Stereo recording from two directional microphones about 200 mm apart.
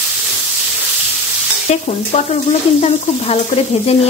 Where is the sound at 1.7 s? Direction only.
35° left (ahead or behind).